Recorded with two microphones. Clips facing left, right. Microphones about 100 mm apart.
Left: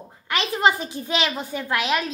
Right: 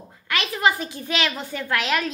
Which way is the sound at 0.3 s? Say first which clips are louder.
Left 1 dB; 25° left (ahead or behind).